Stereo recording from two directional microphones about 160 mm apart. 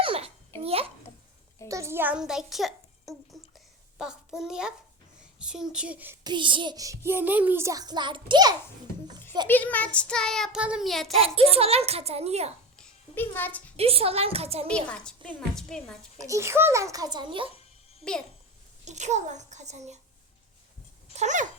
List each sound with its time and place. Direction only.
0.0 s babbling: 35° right (ahead or behind)
1.6 s a child's voice: 20° right (ahead or behind); by 4.7 s 5° right (ahead or behind)
5.4 s child singing: 5° right (ahead or behind)
6.2 s a child's voice: 30° right (ahead or behind)
9.5 s child singing: 10° left (ahead or behind)
11.3 s a child's voice: 40° right (ahead or behind)
12.7 s music: 10° left (ahead or behind)
13.7 s a child's voice: 40° right (ahead or behind)
14.8 s child singing: 5° left (ahead or behind)
16.2 s a child's voice: 20° right (ahead or behind)
18.9 s a child's voice: 45° right (ahead or behind)
21.1 s dog: 45° right (ahead or behind)